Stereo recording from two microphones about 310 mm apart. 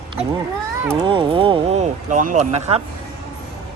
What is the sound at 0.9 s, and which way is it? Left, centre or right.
Speech, centre.